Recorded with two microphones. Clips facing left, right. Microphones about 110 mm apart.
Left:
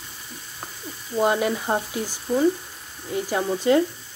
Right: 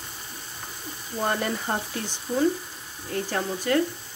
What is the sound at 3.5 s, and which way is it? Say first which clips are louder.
Speech: left 7 dB; 20° left (ahead or behind).